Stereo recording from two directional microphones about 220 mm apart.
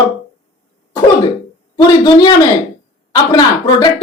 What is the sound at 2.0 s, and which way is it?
Speech, 20° left (ahead or behind).